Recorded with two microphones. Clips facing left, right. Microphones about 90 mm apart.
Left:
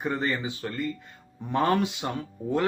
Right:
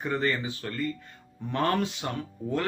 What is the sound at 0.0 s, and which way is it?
A man's voice, 20° left (ahead or behind).